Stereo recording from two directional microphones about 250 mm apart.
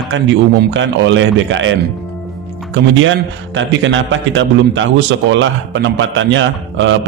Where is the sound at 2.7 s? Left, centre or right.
Right.